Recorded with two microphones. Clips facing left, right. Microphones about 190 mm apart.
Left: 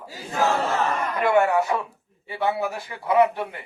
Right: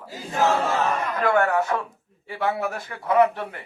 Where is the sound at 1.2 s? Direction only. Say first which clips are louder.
Left 2 dB; 15° left (ahead or behind).